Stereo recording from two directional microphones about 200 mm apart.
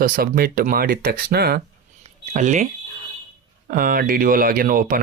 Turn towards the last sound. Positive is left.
turn(degrees=-45)  # may be behind; listen again after turning